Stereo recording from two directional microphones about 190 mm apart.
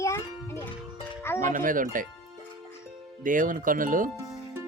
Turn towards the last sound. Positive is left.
turn(degrees=-45)  # may be behind; listen again after turning